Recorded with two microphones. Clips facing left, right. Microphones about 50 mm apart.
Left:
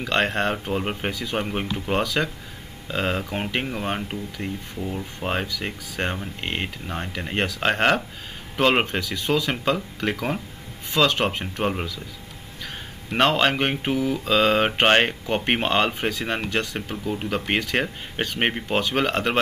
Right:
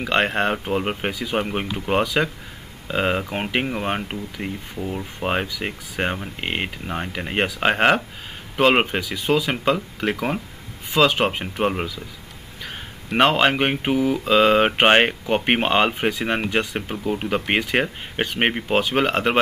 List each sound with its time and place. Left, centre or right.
0.0 s speech: centre